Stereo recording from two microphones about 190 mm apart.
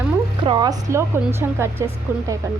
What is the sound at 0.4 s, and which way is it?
A woman's voice, 25° right (ahead or behind).